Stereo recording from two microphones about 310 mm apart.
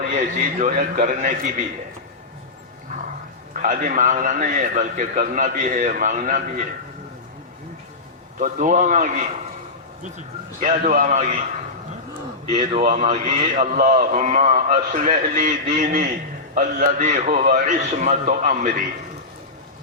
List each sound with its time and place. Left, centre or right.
0.1 s a man's voice: right
3.6 s a man's voice: right
8.4 s a man's voice: right
10.6 s a man's voice: right
12.5 s a man's voice: centre